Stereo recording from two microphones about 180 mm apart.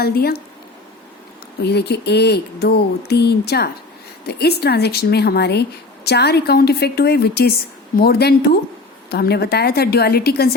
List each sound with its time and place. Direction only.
0.0 s speech: 60° left (ahead or behind)
1.6 s speech: 65° left (ahead or behind)